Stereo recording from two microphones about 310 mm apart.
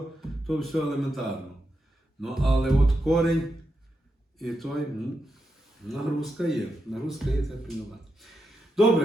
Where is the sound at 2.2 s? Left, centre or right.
Centre.